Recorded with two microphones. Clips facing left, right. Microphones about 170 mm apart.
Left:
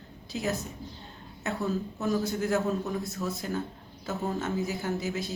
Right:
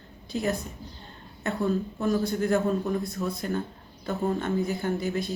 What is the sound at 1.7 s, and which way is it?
A man's voice, 5° left (ahead or behind).